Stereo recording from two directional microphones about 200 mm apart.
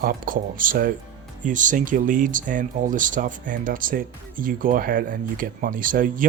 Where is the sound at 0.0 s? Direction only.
45° right (ahead or behind).